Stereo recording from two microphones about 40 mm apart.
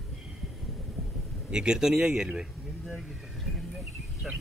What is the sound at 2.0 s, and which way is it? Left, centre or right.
Speech, right.